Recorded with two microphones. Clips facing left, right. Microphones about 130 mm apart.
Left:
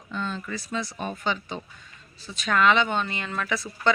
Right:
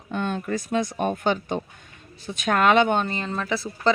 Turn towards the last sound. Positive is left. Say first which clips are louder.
# right 2 dB
turn(degrees=-30)  # may be behind; listen again after turning